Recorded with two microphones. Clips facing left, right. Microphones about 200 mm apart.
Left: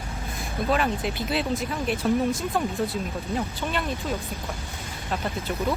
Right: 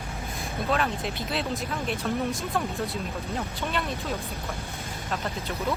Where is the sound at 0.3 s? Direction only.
Centre (ahead or behind).